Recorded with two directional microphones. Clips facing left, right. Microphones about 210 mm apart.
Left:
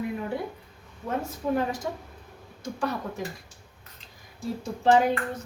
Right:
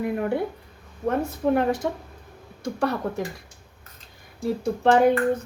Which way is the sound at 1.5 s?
65° right (ahead or behind).